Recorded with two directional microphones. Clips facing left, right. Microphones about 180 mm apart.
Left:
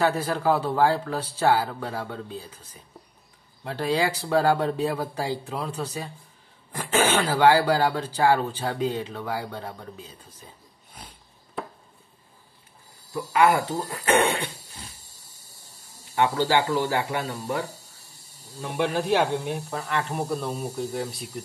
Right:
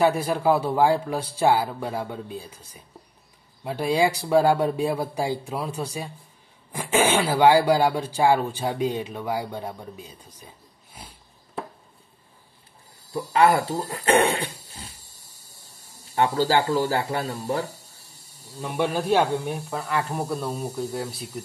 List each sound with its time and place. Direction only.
0.0 s speech: 10° right (ahead or behind)
10.9 s a sound: 10° right (ahead or behind)
13.1 s speech: 30° right (ahead or behind)
16.2 s speech: 35° right (ahead or behind)
19.7 s speech: 5° right (ahead or behind)